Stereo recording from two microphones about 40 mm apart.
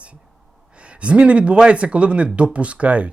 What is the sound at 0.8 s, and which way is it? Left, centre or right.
Speech, right.